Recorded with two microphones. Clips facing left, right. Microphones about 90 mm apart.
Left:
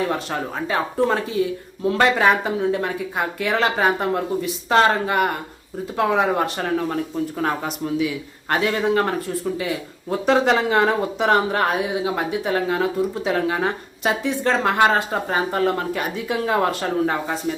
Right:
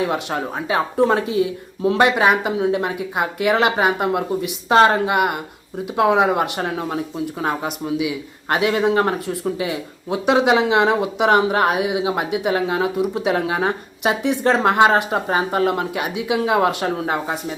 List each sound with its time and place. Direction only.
0.0 s speech: 15° right (ahead or behind)